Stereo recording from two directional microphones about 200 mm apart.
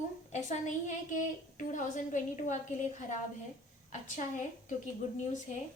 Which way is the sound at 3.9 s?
35° left (ahead or behind).